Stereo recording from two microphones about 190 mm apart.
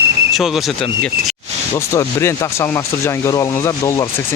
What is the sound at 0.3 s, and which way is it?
Speech, centre (ahead or behind).